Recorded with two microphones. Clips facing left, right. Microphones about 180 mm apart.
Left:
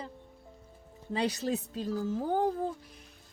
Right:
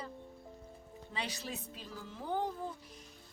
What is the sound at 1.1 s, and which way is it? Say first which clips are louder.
Speech: left 11 dB; 40° left (ahead or behind).